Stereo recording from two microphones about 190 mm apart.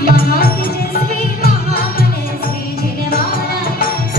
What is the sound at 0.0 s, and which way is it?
Music, 50° left (ahead or behind).